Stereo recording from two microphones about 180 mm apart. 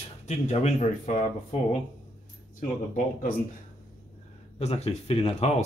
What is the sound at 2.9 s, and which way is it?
Speech, 50° left (ahead or behind).